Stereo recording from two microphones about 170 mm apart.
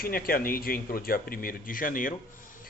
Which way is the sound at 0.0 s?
60° left (ahead or behind).